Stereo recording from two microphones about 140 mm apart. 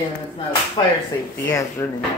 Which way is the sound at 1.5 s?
20° left (ahead or behind).